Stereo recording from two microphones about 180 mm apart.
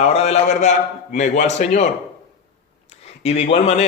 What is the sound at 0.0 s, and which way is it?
A man's voice, 35° left (ahead or behind).